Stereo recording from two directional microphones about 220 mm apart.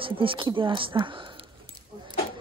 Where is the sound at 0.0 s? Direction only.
25° right (ahead or behind).